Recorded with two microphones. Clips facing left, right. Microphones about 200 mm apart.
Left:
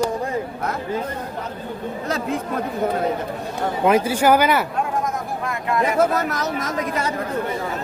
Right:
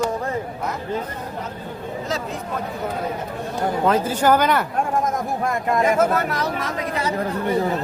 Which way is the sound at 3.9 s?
10° left (ahead or behind).